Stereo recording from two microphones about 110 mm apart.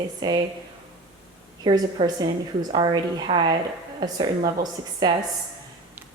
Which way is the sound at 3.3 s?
60° right (ahead or behind).